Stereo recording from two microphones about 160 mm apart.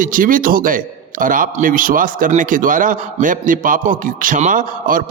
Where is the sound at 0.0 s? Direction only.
60° right (ahead or behind).